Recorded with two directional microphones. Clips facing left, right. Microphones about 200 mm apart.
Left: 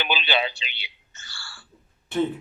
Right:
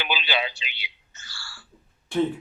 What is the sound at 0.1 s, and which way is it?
Speech, 50° left (ahead or behind).